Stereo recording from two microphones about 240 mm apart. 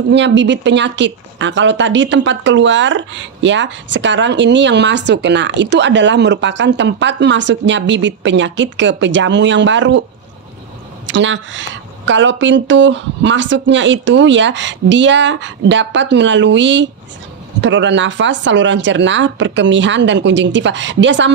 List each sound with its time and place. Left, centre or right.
0.1 s speech: right
11.1 s speech: right